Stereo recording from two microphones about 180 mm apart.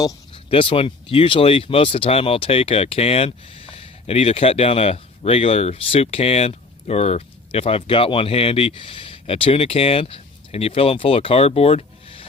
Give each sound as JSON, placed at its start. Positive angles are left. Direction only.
{"t": 0.5, "sound": "speech", "side_deg": 30}